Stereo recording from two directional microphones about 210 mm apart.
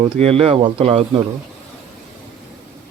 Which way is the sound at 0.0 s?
30° right (ahead or behind).